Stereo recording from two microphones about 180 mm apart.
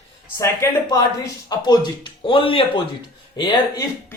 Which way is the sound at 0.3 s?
15° left (ahead or behind).